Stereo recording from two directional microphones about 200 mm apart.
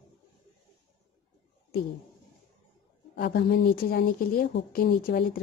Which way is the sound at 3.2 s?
45° left (ahead or behind).